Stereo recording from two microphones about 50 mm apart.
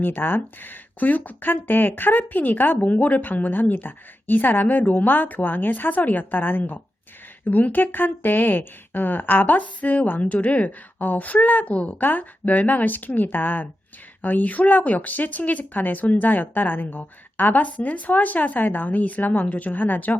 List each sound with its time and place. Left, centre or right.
0.0 s speech: left